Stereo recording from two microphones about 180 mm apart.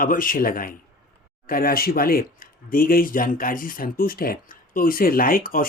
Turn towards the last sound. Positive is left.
turn(degrees=50)  # may be behind; listen again after turning